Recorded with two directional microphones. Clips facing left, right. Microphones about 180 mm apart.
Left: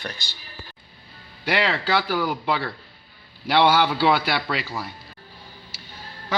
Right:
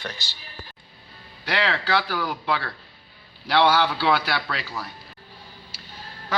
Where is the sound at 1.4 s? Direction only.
10° left (ahead or behind).